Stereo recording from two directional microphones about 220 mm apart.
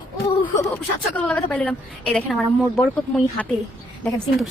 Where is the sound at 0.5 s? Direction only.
5° left (ahead or behind).